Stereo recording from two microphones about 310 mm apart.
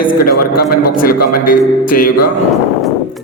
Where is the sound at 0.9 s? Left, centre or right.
Left.